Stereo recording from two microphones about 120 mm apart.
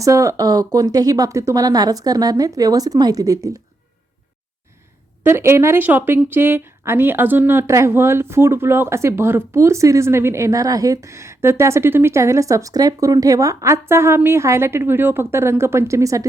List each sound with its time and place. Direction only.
0.0 s speech: 25° right (ahead or behind)
5.2 s a woman's voice: 20° right (ahead or behind)